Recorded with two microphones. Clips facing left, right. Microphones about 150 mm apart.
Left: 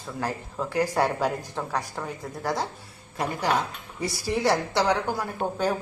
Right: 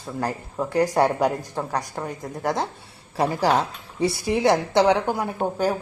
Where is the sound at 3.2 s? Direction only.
35° right (ahead or behind).